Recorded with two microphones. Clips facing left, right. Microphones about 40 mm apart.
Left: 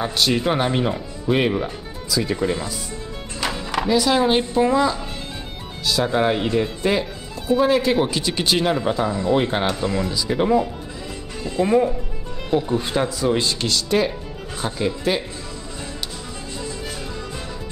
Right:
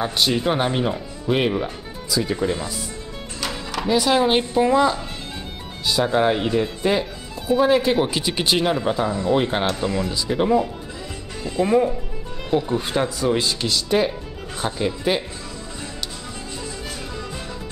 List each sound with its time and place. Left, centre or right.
0.3 s speech: centre
3.3 s music: centre
3.8 s speech: centre
6.0 s speech: centre